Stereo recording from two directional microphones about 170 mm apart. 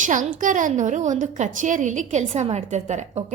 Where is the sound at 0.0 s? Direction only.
50° right (ahead or behind).